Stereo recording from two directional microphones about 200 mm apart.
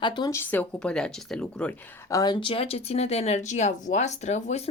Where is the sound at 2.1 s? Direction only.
20° left (ahead or behind).